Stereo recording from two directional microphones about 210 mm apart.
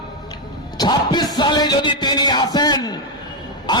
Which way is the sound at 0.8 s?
20° left (ahead or behind).